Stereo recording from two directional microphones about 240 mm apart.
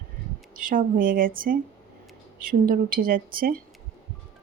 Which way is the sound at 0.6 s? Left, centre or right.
Right.